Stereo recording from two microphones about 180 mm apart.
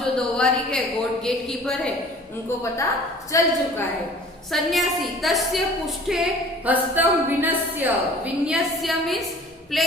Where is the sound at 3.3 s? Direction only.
15° left (ahead or behind).